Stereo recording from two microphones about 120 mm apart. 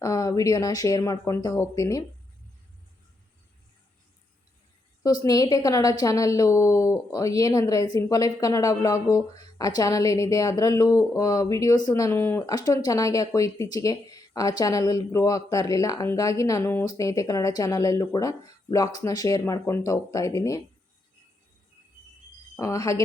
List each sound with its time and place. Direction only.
0.0 s a woman's voice: 25° left (ahead or behind)
5.2 s a woman's voice: 30° left (ahead or behind)
12.5 s a woman's voice: 30° left (ahead or behind)
22.5 s a woman's voice: 25° left (ahead or behind)